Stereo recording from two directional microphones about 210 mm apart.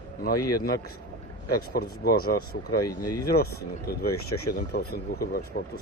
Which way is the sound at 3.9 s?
50° left (ahead or behind).